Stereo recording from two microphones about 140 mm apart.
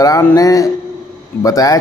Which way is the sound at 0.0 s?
25° left (ahead or behind).